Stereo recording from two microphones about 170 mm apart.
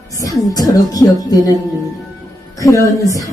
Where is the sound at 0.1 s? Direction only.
20° left (ahead or behind).